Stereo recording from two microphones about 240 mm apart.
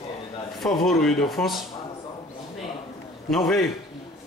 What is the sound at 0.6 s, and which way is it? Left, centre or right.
Speech, centre.